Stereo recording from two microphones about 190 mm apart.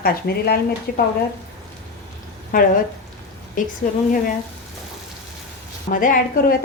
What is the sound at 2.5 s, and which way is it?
Speech, 45° left (ahead or behind).